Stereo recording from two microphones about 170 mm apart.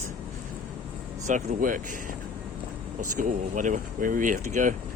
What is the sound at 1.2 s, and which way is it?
Speech, 50° right (ahead or behind).